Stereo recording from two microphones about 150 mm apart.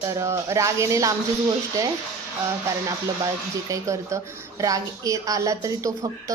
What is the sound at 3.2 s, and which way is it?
Speech, 20° right (ahead or behind).